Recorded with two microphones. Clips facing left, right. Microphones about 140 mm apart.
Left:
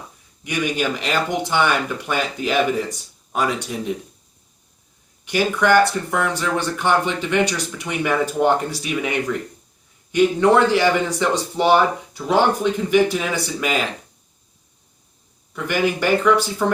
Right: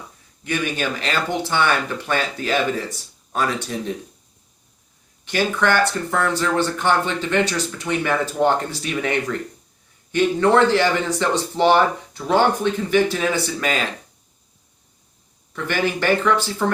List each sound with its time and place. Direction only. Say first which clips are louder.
0.4 s speech: left 1 dB; 15° left (ahead or behind)
5.2 s speech: left 1 dB; 10° left (ahead or behind)
15.5 s speech: left 2 dB; 10° left (ahead or behind)